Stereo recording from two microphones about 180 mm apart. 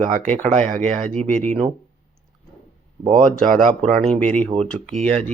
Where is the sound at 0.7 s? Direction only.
45° right (ahead or behind).